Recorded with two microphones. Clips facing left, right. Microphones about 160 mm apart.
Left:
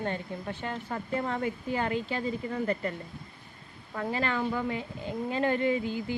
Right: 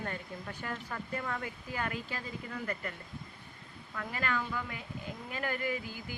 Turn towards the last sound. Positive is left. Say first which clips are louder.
# left 9 dB
turn(degrees=25)  # may be behind; listen again after turning